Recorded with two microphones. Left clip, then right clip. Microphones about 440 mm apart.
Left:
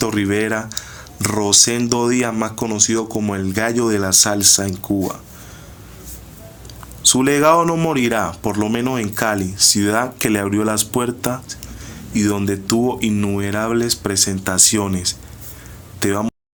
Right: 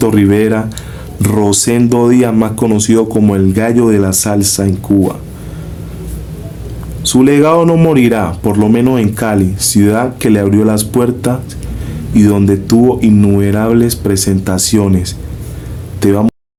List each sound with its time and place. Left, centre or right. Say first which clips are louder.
0.0 s speech: right 9 dB; left
7.0 s speech: right 5 dB; left